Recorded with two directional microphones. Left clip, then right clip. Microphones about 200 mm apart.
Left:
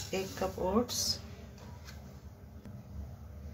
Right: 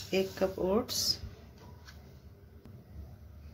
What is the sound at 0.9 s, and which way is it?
Speech, 35° right (ahead or behind).